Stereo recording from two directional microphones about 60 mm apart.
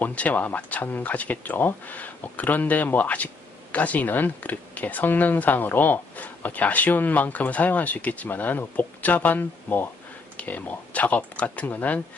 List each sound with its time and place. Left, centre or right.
0.0 s speech: left